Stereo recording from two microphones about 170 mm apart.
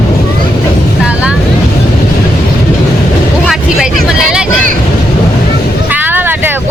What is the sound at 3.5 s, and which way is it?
Vehicle, 5° right (ahead or behind).